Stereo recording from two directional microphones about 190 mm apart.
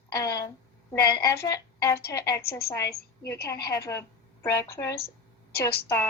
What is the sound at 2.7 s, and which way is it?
A woman's voice, 15° left (ahead or behind).